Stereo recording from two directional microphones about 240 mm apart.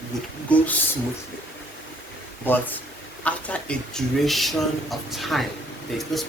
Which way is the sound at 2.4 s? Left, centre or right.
Centre.